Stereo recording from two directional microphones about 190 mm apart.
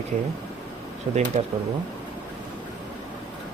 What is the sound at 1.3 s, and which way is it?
Speech, 45° right (ahead or behind).